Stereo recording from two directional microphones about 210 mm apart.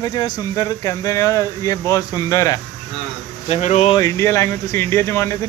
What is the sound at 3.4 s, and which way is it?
Speech, 30° left (ahead or behind).